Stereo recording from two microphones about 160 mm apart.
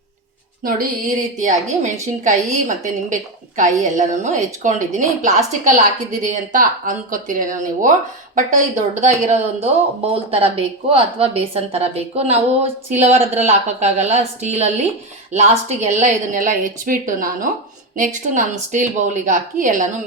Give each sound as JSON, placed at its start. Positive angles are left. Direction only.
{"t": 0.6, "sound": "music", "side_deg": -60}
{"t": 1.4, "sound": "a woman's voice", "side_deg": -50}